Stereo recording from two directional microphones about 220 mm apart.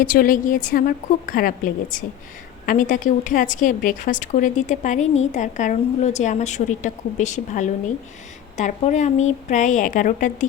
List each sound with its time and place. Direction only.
0.0 s a woman's voice: 40° left (ahead or behind)